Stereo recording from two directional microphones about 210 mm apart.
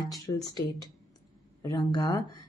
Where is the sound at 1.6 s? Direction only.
20° left (ahead or behind).